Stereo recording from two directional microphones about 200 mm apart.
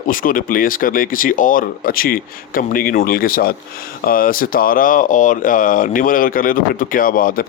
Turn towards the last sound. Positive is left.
turn(degrees=45)  # may be behind; listen again after turning